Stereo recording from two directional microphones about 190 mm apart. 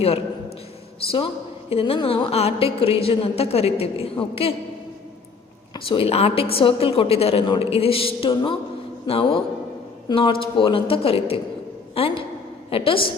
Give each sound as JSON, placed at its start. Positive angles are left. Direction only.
{"t": 1.7, "sound": "a woman's voice", "side_deg": 30}
{"t": 5.7, "sound": "a woman's voice", "side_deg": 25}